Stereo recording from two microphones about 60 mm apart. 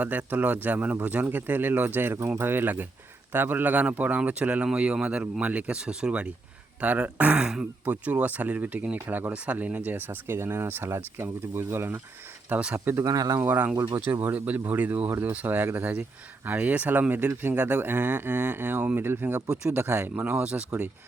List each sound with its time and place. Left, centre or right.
0.0 s speech: right
7.4 s speech: centre
7.9 s speech: right
12.5 s speech: right
13.1 s speech: right
13.4 s speech: right
20.3 s speech: centre